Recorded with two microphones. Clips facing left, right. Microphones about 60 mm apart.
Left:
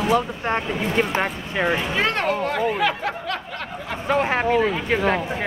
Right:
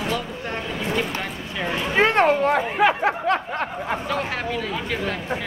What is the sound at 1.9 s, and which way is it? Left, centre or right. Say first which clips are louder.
Speech: right 4 dB; right.